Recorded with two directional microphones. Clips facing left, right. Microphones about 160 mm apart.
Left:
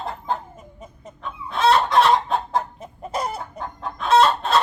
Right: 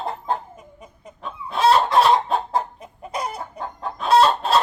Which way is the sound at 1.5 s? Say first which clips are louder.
Right 1 dB; 10° right (ahead or behind).